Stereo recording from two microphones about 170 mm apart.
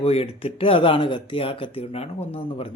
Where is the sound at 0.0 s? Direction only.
35° left (ahead or behind).